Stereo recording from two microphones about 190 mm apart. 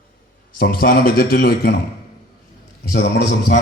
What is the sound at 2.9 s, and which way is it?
Speech, 50° left (ahead or behind).